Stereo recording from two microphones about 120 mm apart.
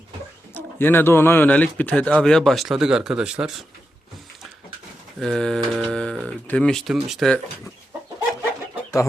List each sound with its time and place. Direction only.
0.5 s speech: 15° left (ahead or behind); by 3.6 s 5° right (ahead or behind)
5.2 s speech: 5° left (ahead or behind)